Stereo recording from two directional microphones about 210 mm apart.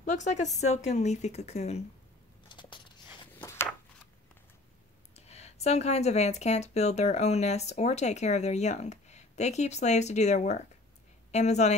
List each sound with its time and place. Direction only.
0.1 s speech: 35° left (ahead or behind)
2.5 s biting: 20° left (ahead or behind)
3.3 s a sound: 10° left (ahead or behind)
5.1 s speech: 30° left (ahead or behind)